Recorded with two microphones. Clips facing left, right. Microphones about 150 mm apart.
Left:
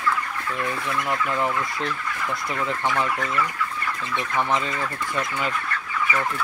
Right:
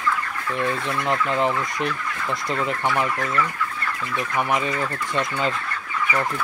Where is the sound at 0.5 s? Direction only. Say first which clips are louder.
Right 3 dB; 20° right (ahead or behind).